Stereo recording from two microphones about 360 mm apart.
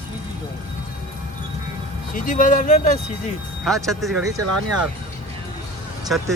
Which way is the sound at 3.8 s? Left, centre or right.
Centre.